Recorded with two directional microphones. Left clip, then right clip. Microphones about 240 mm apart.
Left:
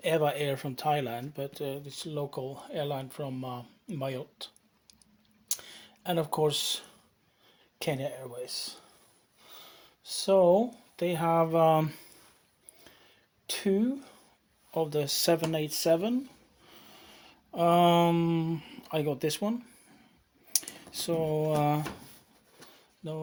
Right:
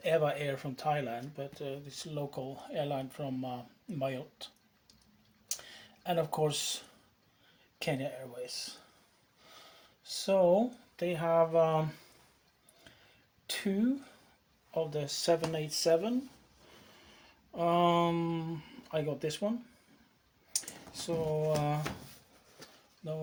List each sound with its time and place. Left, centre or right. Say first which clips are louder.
0.0 s speech: left 3 dB; left
5.5 s a sound: left 4 dB; left
7.8 s speech: left 3 dB; left
13.5 s speech: left 4 dB; left